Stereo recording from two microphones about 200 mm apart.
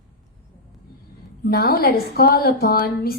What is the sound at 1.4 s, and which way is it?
A woman's voice, 50° left (ahead or behind).